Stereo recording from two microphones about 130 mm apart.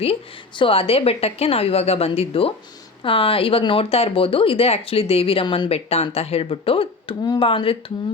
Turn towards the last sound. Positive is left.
turn(degrees=45)  # may be behind; listen again after turning